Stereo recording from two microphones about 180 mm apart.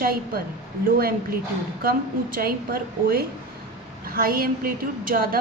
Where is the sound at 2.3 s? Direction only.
55° right (ahead or behind).